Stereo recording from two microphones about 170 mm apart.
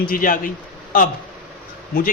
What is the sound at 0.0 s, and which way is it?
Speech, 55° left (ahead or behind).